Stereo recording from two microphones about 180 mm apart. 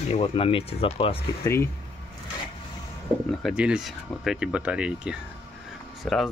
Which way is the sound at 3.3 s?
Centre (ahead or behind).